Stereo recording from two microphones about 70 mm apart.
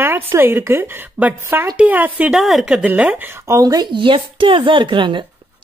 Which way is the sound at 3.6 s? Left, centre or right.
Right.